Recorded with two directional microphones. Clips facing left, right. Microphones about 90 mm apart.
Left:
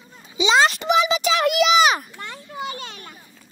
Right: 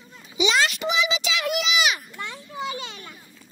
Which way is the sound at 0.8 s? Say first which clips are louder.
Left 6 dB; 50° left (ahead or behind).